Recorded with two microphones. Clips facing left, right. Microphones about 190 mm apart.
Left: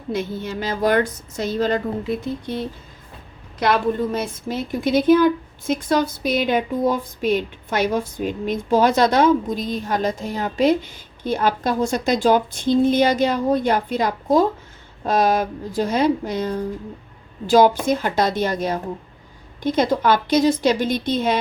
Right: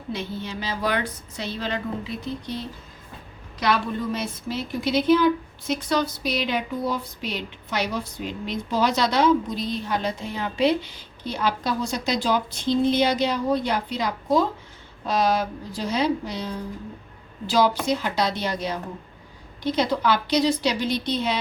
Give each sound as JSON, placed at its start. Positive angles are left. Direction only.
{"t": 0.1, "sound": "a woman's voice", "side_deg": 50}